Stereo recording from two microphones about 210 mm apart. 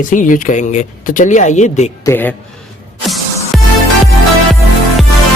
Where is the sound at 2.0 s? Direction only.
10° left (ahead or behind).